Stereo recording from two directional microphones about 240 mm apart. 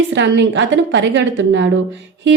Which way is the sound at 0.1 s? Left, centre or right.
Right.